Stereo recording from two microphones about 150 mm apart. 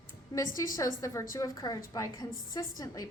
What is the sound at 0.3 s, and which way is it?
A woman's voice, 25° left (ahead or behind).